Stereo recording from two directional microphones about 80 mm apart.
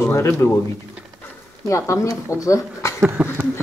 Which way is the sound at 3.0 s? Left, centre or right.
Right.